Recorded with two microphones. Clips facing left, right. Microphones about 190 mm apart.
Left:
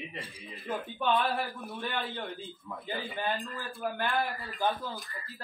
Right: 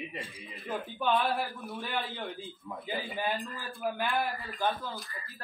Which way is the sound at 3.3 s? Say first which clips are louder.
Even; centre (ahead or behind).